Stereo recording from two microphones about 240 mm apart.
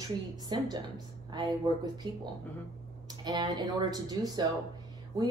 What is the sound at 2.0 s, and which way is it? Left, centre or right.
Speech, centre.